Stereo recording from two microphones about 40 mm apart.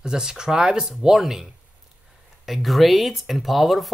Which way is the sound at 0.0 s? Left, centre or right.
Centre.